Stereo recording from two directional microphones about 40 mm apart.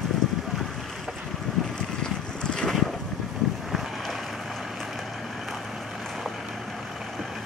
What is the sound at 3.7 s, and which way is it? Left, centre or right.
Boat, centre.